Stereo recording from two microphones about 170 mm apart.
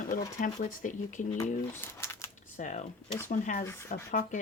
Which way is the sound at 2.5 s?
45° left (ahead or behind).